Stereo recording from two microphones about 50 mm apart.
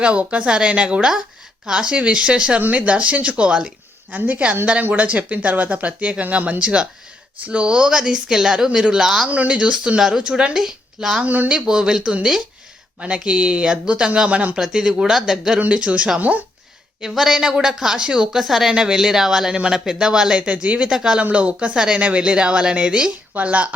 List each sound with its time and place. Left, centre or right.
0.0 s a woman's voice: right
2.6 s a woman's voice: right; by 9.2 s centre
9.2 s a woman's voice: right; by 11.2 s centre
11.2 s speech: right
11.4 s a woman's voice: centre
14.6 s a woman's voice: centre
15.6 s speech: right
17.0 s a woman's voice: centre; by 20.9 s right
20.9 s a woman's voice: centre
21.2 s speech: right
21.8 s a woman's voice: centre
23.3 s speech: right